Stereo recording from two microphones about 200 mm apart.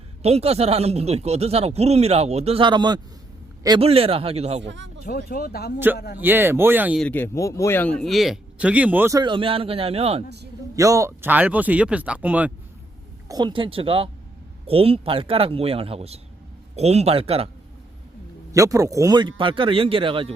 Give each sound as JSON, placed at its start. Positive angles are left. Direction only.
{"t": 0.2, "sound": "a man's voice", "side_deg": -30}
{"t": 4.6, "sound": "speech", "side_deg": -65}
{"t": 5.0, "sound": "speech", "side_deg": 45}
{"t": 6.1, "sound": "speech", "side_deg": -10}
{"t": 7.0, "sound": "speech", "side_deg": 10}
{"t": 10.8, "sound": "speech", "side_deg": -15}
{"t": 13.2, "sound": "a man's voice", "side_deg": -20}
{"t": 18.5, "sound": "a man's voice", "side_deg": -15}